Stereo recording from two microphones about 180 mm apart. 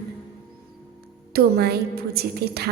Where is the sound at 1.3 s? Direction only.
60° right (ahead or behind).